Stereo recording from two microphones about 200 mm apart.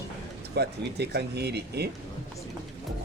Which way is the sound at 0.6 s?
55° right (ahead or behind).